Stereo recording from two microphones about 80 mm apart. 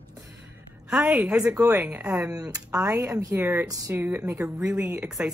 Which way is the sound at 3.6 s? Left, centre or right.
Right.